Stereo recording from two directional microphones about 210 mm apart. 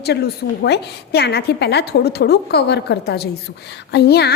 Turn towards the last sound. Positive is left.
turn(degrees=50)  # may be behind; listen again after turning